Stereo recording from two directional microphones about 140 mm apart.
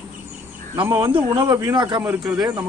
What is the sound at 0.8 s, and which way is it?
A man's voice, 20° right (ahead or behind).